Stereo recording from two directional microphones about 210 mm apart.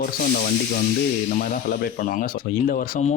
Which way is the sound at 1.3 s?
40° left (ahead or behind).